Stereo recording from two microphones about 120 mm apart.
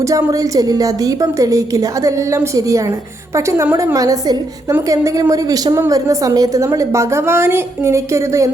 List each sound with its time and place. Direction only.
0.0 s a woman's voice: 30° right (ahead or behind)